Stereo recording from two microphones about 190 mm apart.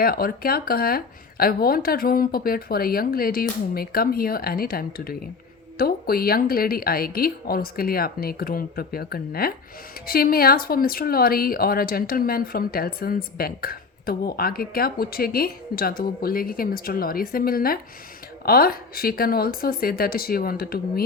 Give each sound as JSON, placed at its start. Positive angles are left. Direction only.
{"t": 0.0, "sound": "speech", "side_deg": 50}